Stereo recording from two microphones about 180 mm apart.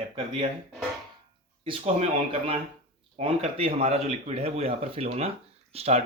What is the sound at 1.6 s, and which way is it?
Speech, 30° right (ahead or behind).